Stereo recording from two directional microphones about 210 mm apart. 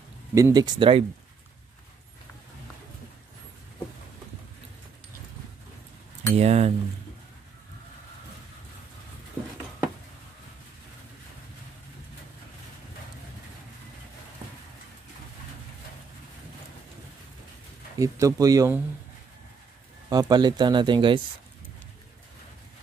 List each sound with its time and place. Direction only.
0.3 s speech: 15° right (ahead or behind)
6.3 s speech: 30° right (ahead or behind)
17.9 s speech: 15° right (ahead or behind)
20.1 s speech: 20° right (ahead or behind)